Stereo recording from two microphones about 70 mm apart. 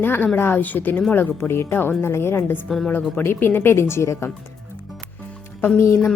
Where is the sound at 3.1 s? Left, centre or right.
Left.